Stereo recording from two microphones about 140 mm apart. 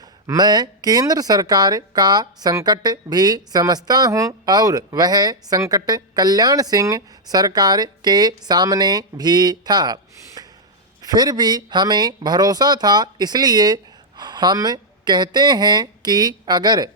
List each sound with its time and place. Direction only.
0.3 s speech: 30° right (ahead or behind)